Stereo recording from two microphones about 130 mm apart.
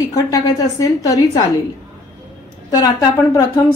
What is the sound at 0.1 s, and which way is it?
A woman's voice, 30° left (ahead or behind).